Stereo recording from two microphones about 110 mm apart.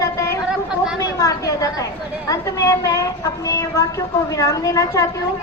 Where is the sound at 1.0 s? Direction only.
30° left (ahead or behind).